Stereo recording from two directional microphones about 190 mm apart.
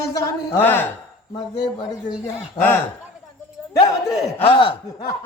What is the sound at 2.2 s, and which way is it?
Speech, 10° left (ahead or behind).